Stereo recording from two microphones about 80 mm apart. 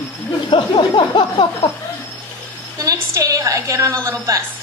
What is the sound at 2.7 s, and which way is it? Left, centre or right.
A woman's voice, right.